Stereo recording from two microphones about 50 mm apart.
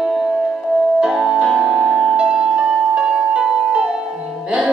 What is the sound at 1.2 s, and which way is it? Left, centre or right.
Music, centre.